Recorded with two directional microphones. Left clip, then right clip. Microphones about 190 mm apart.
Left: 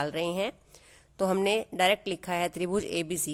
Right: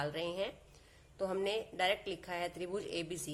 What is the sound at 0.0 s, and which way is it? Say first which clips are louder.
A woman's voice: left 8 dB; 50° left (ahead or behind).